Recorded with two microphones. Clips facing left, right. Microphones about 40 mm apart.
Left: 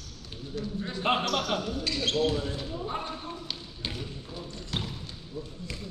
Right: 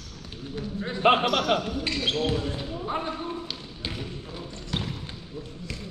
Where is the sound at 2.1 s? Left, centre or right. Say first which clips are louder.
Even; right.